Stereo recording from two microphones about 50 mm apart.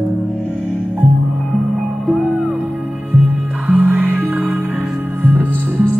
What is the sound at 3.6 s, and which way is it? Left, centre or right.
Music, right.